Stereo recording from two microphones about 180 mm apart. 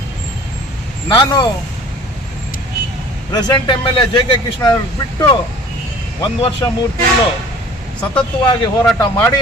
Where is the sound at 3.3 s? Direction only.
25° left (ahead or behind).